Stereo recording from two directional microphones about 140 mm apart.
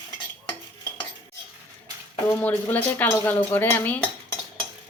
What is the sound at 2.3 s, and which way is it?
Speech, 15° left (ahead or behind).